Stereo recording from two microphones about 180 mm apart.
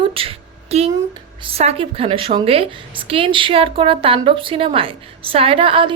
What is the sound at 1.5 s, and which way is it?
A woman's voice, 35° right (ahead or behind).